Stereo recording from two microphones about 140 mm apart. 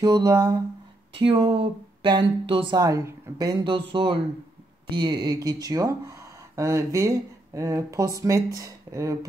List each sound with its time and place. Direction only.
0.0 s speech: 25° right (ahead or behind)
1.2 s speech: 45° right (ahead or behind)
2.8 s speech: 20° right (ahead or behind)